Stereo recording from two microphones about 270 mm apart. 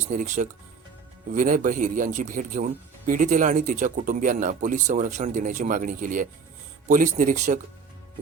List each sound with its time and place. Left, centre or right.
0.1 s speech: right